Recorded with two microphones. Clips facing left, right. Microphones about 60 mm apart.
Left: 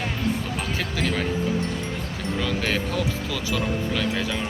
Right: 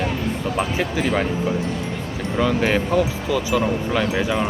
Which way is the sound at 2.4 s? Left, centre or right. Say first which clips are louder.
Right 8 dB; centre.